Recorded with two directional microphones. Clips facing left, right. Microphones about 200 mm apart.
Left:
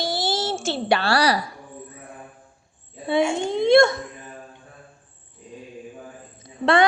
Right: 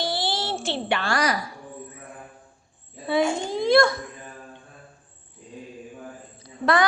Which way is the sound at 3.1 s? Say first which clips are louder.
Left 1 dB; 25° left (ahead or behind).